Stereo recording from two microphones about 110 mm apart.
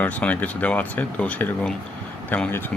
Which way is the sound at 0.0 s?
15° left (ahead or behind).